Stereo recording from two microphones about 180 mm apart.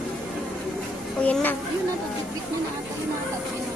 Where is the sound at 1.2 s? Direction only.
10° left (ahead or behind).